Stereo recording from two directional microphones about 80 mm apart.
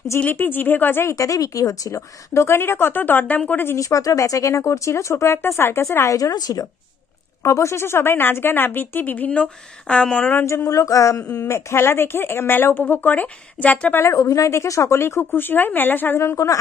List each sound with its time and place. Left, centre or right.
0.2 s speech: left
1.1 s speech: left; by 3.6 s centre
3.6 s speech: left
7.4 s speech: left; by 10.3 s centre
10.3 s speech: left
14.0 s speech: left
16.2 s speech: left